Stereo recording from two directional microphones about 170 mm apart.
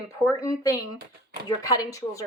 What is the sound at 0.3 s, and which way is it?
A woman's voice, 20° left (ahead or behind).